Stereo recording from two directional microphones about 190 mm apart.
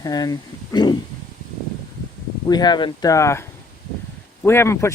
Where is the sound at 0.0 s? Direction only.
20° left (ahead or behind).